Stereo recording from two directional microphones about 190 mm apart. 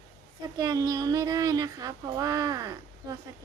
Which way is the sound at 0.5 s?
20° right (ahead or behind).